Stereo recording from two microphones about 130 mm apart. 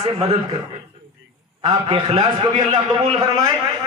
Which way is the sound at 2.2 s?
35° right (ahead or behind).